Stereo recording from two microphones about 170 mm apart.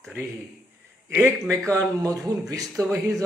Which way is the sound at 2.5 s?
20° right (ahead or behind).